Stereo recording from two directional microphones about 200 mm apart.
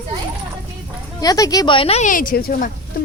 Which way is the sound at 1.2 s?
20° left (ahead or behind).